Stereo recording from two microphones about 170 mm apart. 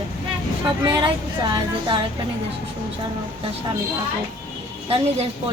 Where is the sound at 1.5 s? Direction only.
25° right (ahead or behind).